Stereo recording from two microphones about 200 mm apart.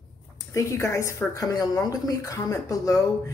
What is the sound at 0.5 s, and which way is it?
A woman's voice, 15° left (ahead or behind).